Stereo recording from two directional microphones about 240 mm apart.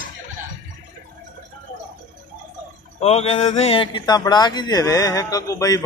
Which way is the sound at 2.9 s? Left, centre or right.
Left.